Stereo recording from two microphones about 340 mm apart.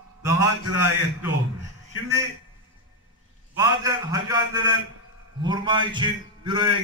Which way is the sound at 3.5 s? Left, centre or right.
Centre.